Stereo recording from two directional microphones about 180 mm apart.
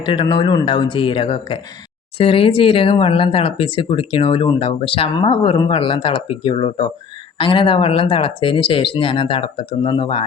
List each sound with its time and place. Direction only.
0.0 s speech: 25° left (ahead or behind)